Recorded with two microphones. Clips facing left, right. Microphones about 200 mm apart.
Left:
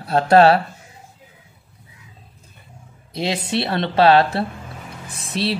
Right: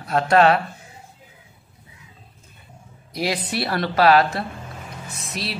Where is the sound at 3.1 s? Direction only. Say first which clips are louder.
Left 2 dB; 25° left (ahead or behind).